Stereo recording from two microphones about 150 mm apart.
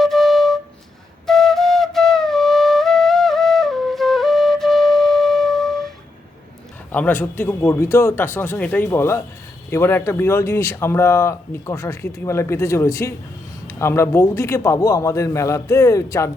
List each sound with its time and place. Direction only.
0.0 s flute: centre (ahead or behind)
6.9 s a man's voice: 10° left (ahead or behind)